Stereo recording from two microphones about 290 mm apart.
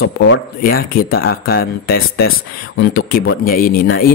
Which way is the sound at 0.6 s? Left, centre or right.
Left.